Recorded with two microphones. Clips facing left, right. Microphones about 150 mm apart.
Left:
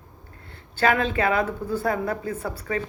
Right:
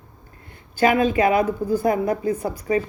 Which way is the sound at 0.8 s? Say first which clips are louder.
Right 4 dB; 15° right (ahead or behind).